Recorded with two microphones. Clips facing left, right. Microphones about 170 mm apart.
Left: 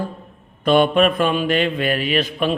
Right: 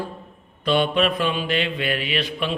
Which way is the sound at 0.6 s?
50° left (ahead or behind).